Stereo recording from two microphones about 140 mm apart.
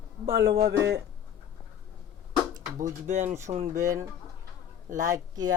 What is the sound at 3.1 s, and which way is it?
Speech, 60° right (ahead or behind).